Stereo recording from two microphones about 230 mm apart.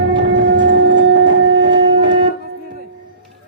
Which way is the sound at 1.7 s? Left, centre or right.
Centre.